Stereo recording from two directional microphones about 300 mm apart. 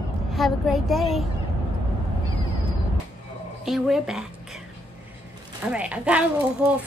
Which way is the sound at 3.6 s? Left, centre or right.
Centre.